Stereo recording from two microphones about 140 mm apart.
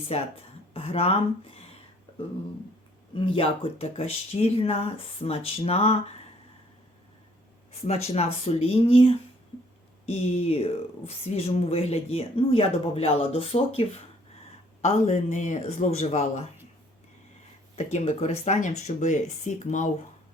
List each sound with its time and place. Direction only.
0.1 s speech: 45° left (ahead or behind)
3.2 s speech: 40° left (ahead or behind)
7.7 s speech: 50° left (ahead or behind)
17.7 s speech: 55° left (ahead or behind)